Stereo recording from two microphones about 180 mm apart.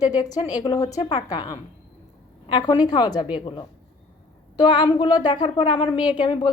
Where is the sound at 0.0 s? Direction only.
20° left (ahead or behind).